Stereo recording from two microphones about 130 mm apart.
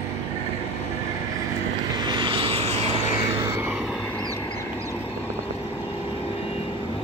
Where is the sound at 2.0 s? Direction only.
40° right (ahead or behind); by 3.0 s 55° right (ahead or behind).